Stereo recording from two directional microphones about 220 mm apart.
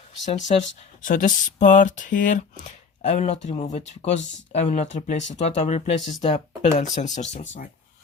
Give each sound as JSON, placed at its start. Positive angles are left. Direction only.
{"t": 0.3, "sound": "speech", "side_deg": 30}